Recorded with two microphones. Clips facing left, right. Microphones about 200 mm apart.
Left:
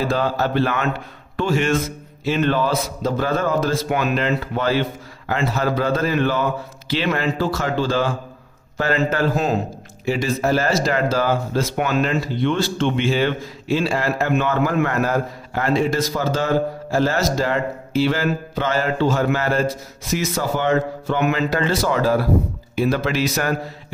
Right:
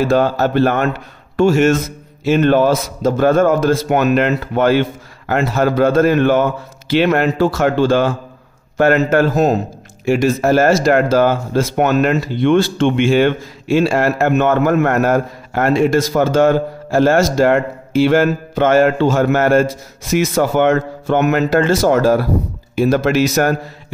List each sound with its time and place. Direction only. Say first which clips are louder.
0.1 s a man's voice: right 6 dB; 50° right (ahead or behind)
9.3 s a man's voice: right 6 dB; 40° right (ahead or behind)
12.1 s a man's voice: right 7 dB; 60° right (ahead or behind); by 23.2 s 45° right (ahead or behind)